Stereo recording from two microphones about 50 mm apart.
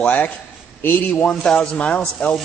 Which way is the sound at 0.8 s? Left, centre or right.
Left.